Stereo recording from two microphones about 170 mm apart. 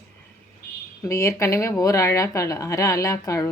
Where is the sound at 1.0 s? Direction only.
15° left (ahead or behind).